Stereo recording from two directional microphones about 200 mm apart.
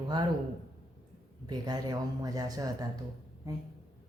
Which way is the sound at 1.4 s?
20° right (ahead or behind).